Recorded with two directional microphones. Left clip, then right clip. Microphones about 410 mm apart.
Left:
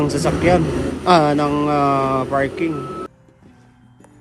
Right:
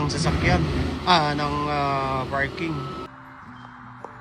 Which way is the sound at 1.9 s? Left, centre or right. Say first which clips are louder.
Left 7 dB; left.